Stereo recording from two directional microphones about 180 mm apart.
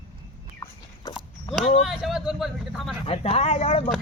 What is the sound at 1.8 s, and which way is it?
Speech, centre (ahead or behind).